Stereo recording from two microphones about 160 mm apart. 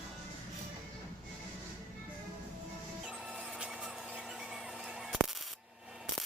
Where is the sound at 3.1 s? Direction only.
5° right (ahead or behind).